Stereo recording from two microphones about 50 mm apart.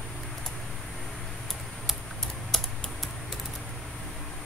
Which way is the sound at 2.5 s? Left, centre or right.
Centre.